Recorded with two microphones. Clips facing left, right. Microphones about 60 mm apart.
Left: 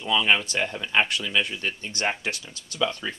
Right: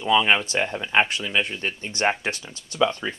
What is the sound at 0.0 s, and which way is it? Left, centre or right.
Speech, centre.